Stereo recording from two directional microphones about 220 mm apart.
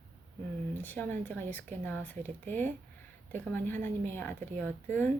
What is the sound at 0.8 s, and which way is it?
Speech, 10° left (ahead or behind).